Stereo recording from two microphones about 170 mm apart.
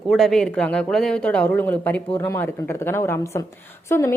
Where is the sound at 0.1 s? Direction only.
Centre (ahead or behind).